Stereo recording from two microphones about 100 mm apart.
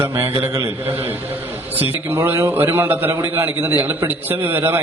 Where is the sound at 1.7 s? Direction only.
20° right (ahead or behind).